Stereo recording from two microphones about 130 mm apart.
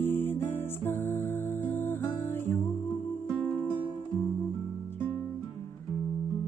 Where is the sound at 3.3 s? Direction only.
5° right (ahead or behind).